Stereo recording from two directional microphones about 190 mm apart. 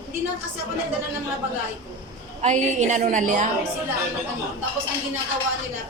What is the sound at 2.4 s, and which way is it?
A woman's voice, 35° right (ahead or behind).